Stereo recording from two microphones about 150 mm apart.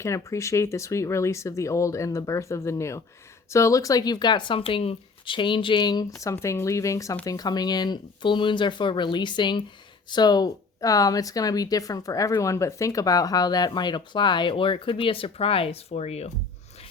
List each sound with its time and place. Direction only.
0.0 s speech: 20° left (ahead or behind); by 16.3 s 45° left (ahead or behind)